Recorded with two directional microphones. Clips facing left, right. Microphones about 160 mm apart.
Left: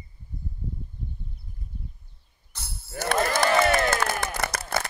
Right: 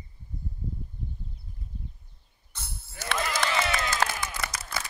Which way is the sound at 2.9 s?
50° left (ahead or behind).